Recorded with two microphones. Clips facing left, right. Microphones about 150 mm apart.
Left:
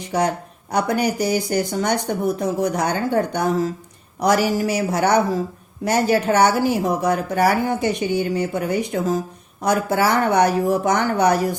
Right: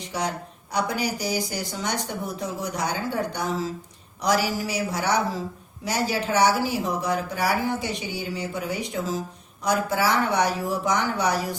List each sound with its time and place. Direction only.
0.7 s a woman's voice: 55° left (ahead or behind)